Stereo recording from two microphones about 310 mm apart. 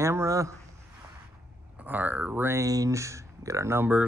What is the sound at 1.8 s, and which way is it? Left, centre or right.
Speech, centre.